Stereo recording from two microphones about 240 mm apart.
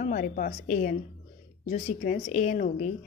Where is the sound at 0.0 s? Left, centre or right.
Left.